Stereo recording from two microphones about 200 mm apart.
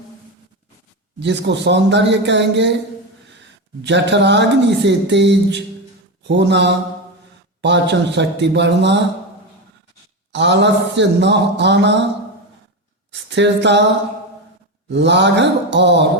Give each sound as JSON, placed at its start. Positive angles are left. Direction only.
{"t": 1.2, "sound": "speech", "side_deg": -60}
{"t": 3.8, "sound": "speech", "side_deg": -60}
{"t": 10.3, "sound": "speech", "side_deg": -60}
{"t": 13.3, "sound": "speech", "side_deg": -60}
{"t": 14.8, "sound": "speech", "side_deg": -60}